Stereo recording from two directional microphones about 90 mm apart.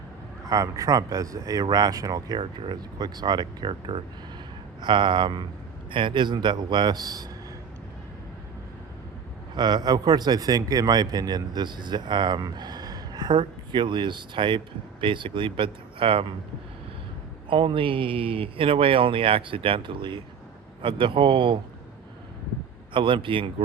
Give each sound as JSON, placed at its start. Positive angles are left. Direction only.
{"t": 0.4, "sound": "speech", "side_deg": -40}
{"t": 2.4, "sound": "speech", "side_deg": -80}
{"t": 3.0, "sound": "speech", "side_deg": -50}
{"t": 4.8, "sound": "a man's voice", "side_deg": -60}
{"t": 5.9, "sound": "a man's voice", "side_deg": -70}
{"t": 9.6, "sound": "a man's voice", "side_deg": -50}
{"t": 17.5, "sound": "speech", "side_deg": -65}
{"t": 22.9, "sound": "speech", "side_deg": -65}